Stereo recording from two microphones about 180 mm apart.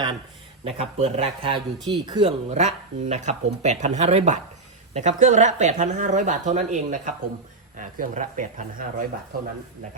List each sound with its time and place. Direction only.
0.6 s a man's voice: 35° right (ahead or behind)